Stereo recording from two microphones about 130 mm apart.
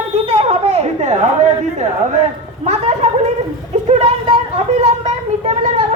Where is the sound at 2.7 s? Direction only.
60° right (ahead or behind).